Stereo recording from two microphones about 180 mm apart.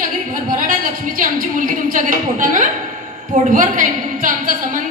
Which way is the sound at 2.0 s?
45° right (ahead or behind).